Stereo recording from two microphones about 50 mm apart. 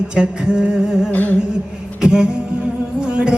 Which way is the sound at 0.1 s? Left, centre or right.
Centre.